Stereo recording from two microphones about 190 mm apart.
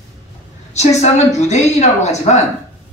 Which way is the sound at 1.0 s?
35° left (ahead or behind).